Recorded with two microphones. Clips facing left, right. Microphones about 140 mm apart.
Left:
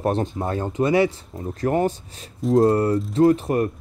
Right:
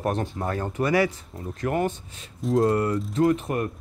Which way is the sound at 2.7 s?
30° left (ahead or behind).